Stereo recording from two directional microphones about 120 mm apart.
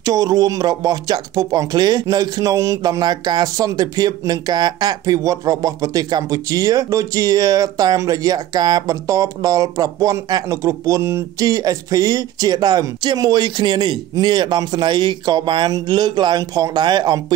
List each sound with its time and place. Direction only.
0.0 s speech: 30° right (ahead or behind)